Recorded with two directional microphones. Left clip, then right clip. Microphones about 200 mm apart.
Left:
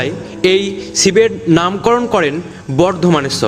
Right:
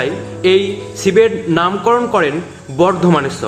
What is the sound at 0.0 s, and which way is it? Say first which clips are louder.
A man's voice: even; 45° left (ahead or behind).